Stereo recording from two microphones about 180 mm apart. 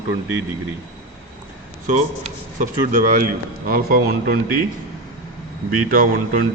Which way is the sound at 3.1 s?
50° right (ahead or behind).